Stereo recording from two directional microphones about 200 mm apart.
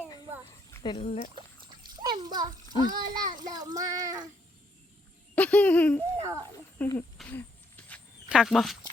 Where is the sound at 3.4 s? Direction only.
20° right (ahead or behind).